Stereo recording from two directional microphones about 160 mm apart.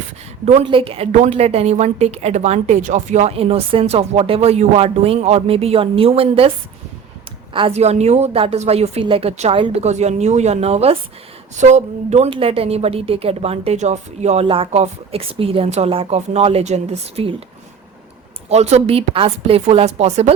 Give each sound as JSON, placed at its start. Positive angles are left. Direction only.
{"t": 0.6, "sound": "a woman's voice", "side_deg": -35}
{"t": 7.5, "sound": "a woman's voice", "side_deg": -35}
{"t": 18.4, "sound": "a woman's voice", "side_deg": -40}